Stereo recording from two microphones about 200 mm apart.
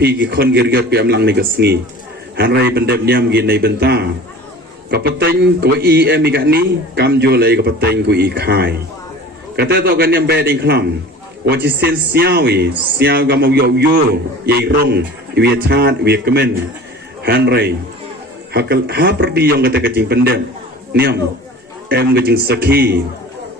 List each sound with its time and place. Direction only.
0.0 s a man's voice: 55° right (ahead or behind)